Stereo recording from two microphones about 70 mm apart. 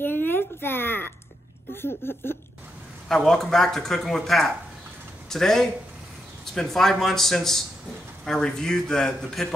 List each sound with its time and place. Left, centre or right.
0.0 s speech: left
3.1 s a man's voice: centre